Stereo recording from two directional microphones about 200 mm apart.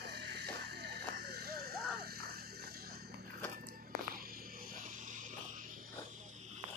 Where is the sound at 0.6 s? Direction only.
55° right (ahead or behind).